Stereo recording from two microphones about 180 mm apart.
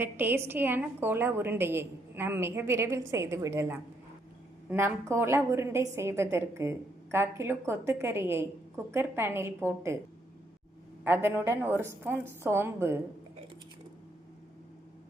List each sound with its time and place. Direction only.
0.0 s a woman's voice: 10° right (ahead or behind)
11.0 s a woman's voice: 10° right (ahead or behind)